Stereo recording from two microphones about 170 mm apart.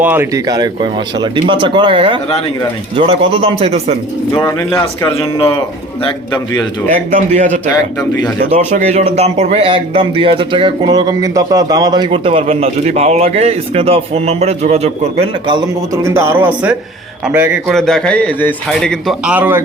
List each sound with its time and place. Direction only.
0.0 s speech: 10° right (ahead or behind); by 3.9 s 35° right (ahead or behind)
6.0 s a man's voice: 30° left (ahead or behind)
6.9 s a man's voice: 45° right (ahead or behind)
8.4 s speech: 40° right (ahead or behind)
16.0 s speech: 15° right (ahead or behind)
17.7 s a man's voice: 5° left (ahead or behind)